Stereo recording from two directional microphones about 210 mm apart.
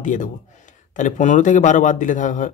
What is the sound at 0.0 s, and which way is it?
Speech, 35° left (ahead or behind).